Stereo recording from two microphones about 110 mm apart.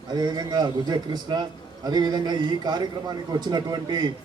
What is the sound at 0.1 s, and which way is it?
A man's voice, 40° right (ahead or behind).